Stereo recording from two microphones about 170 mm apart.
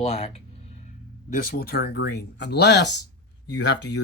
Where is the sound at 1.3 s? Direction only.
60° left (ahead or behind).